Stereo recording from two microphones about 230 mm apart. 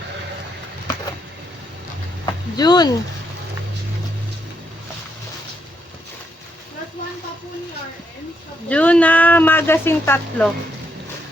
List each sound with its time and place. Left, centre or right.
2.2 s speech: centre
8.7 s speech: centre